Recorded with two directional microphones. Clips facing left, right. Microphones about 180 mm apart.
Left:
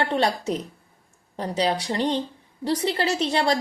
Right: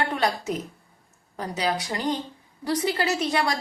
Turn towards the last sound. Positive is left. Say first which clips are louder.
# left 2 dB
turn(degrees=30)  # may be behind; listen again after turning